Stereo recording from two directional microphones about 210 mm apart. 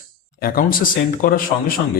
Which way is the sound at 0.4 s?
45° left (ahead or behind).